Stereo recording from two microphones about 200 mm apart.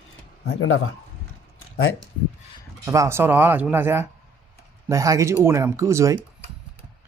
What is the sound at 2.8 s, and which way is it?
Speech, 15° right (ahead or behind).